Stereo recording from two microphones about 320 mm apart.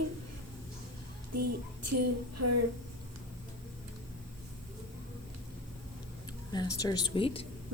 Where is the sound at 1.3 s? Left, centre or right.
Right.